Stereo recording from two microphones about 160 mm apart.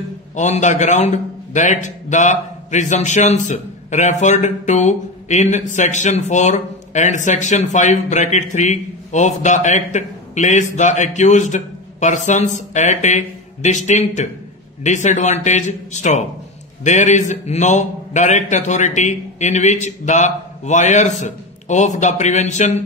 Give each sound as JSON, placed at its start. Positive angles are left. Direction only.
{"t": 0.4, "sound": "a man's voice", "side_deg": 50}